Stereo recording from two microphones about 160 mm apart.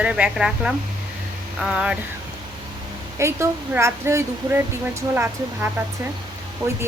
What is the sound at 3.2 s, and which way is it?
Speech, 15° right (ahead or behind).